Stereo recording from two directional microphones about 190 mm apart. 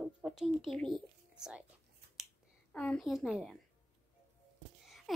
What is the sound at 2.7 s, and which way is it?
Speech, 5° left (ahead or behind).